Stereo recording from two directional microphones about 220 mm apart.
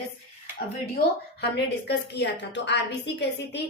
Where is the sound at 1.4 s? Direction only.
50° left (ahead or behind).